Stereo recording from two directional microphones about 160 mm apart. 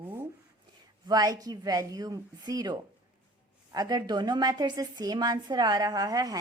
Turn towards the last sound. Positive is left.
turn(degrees=-20)  # may be behind; listen again after turning